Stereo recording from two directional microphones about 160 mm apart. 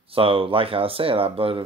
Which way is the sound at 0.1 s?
35° right (ahead or behind).